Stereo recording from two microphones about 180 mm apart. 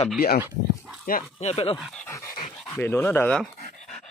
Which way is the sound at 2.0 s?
15° left (ahead or behind).